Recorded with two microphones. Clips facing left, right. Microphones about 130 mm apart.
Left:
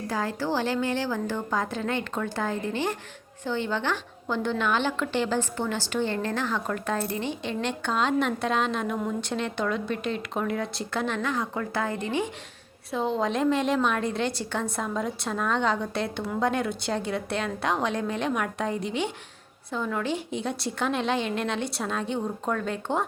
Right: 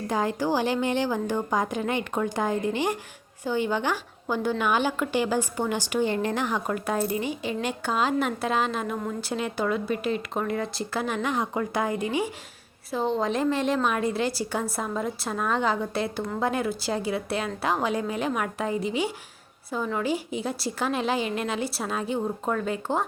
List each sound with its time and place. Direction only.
0.1 s a woman's voice: 20° right (ahead or behind)